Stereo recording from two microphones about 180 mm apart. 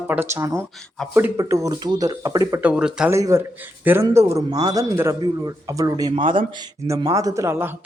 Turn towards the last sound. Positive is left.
turn(degrees=-15)  # may be behind; listen again after turning